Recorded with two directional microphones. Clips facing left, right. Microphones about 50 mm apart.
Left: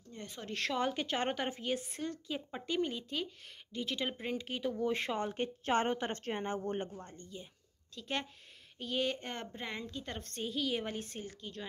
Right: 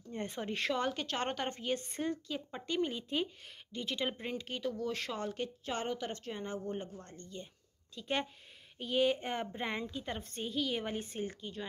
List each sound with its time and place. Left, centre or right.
0.1 s a sound: right
0.5 s a woman's voice: centre
0.7 s a woman's voice: centre
5.7 s a woman's voice: left
6.9 s speech: centre
7.9 s a woman's voice: centre